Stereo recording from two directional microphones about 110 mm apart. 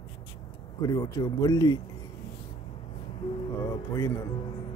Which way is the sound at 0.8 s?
35° left (ahead or behind).